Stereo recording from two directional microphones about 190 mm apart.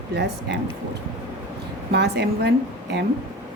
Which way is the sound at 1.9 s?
60° right (ahead or behind).